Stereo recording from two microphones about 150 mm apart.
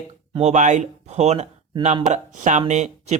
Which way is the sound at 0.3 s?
50° right (ahead or behind).